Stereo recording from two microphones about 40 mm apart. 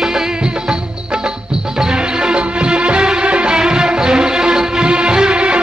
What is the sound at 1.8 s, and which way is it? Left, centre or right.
Music, centre.